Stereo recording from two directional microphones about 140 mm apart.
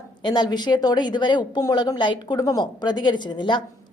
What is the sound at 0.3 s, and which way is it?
A woman's voice, 30° left (ahead or behind).